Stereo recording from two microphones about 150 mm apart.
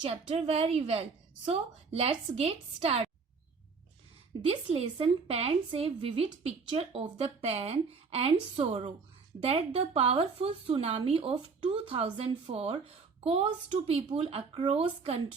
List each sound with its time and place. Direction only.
0.1 s a woman's voice: 40° right (ahead or behind)
4.4 s speech: 40° right (ahead or behind)